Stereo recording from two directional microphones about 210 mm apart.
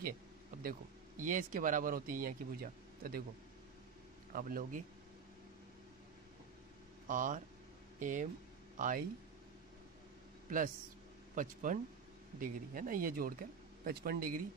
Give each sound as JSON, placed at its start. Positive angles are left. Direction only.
{"t": 0.6, "sound": "speech", "side_deg": -40}
{"t": 4.3, "sound": "speech", "side_deg": -40}
{"t": 7.1, "sound": "speech", "side_deg": -40}
{"t": 11.3, "sound": "speech", "side_deg": -40}